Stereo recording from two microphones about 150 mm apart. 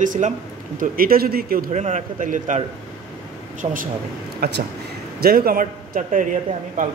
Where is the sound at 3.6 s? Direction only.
65° right (ahead or behind).